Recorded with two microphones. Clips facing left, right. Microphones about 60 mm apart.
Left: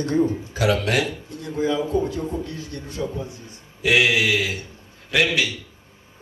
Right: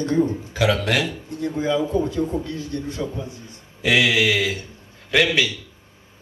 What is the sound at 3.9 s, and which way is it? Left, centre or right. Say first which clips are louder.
Speech: even; left.